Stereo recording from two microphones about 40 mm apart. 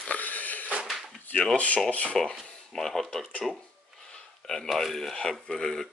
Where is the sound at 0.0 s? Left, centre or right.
Left.